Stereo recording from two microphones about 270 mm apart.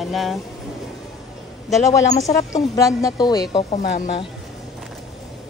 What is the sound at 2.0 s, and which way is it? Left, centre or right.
Speech, left.